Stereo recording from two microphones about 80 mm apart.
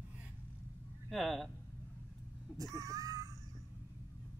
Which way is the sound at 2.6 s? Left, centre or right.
Right.